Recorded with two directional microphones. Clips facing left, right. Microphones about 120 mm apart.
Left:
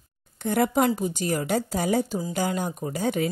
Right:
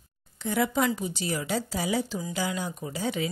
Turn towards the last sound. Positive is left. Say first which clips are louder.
# left 4 dB
turn(degrees=50)  # may be behind; listen again after turning